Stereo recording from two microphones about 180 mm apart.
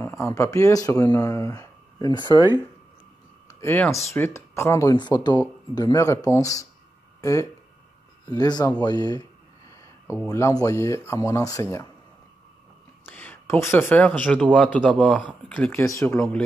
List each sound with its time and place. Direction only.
0.0 s speech: 20° left (ahead or behind)
3.4 s a sound: 15° left (ahead or behind)
4.1 s speech: 15° left (ahead or behind)
10.2 s speech: 20° left (ahead or behind)
13.0 s speech: 10° left (ahead or behind)